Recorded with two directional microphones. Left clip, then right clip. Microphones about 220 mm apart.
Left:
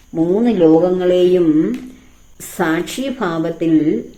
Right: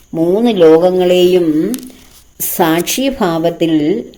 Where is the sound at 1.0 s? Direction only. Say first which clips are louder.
Right 3 dB; 30° right (ahead or behind).